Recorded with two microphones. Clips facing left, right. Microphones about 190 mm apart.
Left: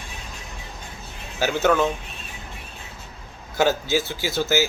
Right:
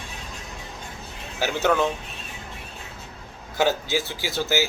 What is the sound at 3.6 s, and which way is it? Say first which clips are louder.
Speech: left 2 dB; 15° right (ahead or behind).